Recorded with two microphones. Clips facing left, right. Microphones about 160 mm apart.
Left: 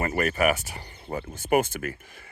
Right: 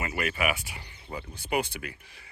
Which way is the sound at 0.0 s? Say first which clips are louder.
Left 6 dB; 45° left (ahead or behind).